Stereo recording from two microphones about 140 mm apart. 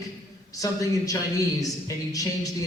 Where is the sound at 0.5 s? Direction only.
25° left (ahead or behind).